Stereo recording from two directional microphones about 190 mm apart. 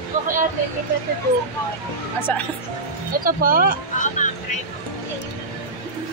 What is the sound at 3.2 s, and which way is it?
Speech, 50° right (ahead or behind).